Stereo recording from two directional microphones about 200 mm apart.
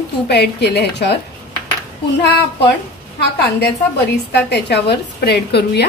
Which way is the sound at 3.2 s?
55° left (ahead or behind).